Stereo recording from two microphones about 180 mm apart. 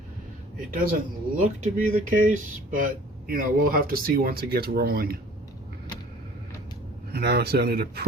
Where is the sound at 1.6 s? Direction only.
45° right (ahead or behind).